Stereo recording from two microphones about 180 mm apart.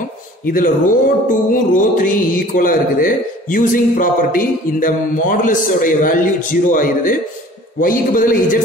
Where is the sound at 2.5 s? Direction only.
50° left (ahead or behind).